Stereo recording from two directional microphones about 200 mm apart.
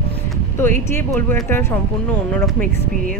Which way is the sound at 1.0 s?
10° left (ahead or behind).